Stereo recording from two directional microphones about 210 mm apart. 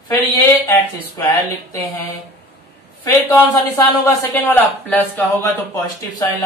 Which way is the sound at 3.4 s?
15° left (ahead or behind).